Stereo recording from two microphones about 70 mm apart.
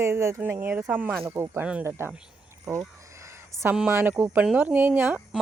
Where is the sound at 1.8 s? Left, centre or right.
Right.